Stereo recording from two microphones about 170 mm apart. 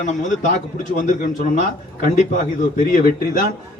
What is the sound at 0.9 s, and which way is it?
A man's voice, 50° left (ahead or behind).